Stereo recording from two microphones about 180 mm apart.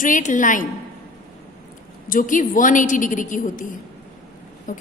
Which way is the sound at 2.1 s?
50° left (ahead or behind).